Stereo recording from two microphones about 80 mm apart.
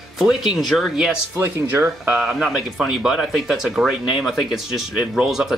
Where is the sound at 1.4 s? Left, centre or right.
Right.